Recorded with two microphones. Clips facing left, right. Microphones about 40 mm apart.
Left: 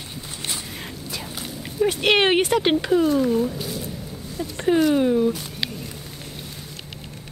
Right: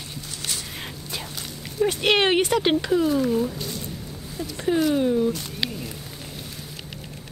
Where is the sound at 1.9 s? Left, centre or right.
Centre.